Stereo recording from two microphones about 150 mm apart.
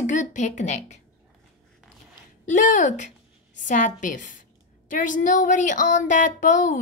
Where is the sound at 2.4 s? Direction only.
60° left (ahead or behind).